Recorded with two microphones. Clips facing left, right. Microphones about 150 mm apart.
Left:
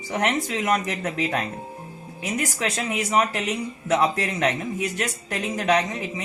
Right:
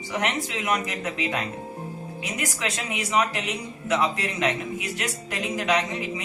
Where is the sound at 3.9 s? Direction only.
35° left (ahead or behind).